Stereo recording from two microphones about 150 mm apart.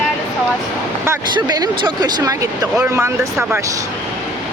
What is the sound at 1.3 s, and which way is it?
Speech, 30° right (ahead or behind).